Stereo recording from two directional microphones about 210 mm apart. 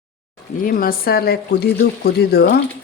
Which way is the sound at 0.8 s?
45° left (ahead or behind).